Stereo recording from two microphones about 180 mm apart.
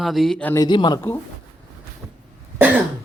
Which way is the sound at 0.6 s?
25° left (ahead or behind).